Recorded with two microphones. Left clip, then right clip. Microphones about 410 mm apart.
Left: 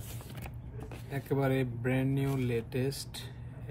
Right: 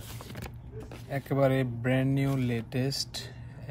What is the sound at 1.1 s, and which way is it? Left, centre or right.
Speech, right.